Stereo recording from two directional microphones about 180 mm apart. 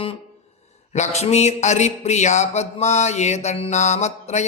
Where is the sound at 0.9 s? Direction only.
40° left (ahead or behind).